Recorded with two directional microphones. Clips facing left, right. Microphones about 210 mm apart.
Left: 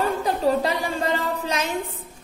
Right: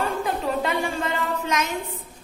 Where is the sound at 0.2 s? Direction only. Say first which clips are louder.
Left 4 dB; 35° left (ahead or behind).